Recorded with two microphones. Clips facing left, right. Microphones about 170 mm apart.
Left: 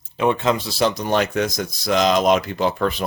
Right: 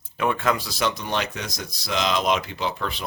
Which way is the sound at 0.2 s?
20° left (ahead or behind).